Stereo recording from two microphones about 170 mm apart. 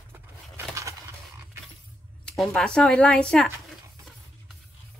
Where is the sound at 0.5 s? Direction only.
15° right (ahead or behind).